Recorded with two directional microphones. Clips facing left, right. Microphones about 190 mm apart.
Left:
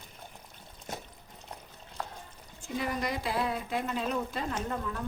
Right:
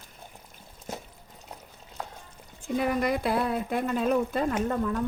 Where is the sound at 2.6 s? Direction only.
55° right (ahead or behind).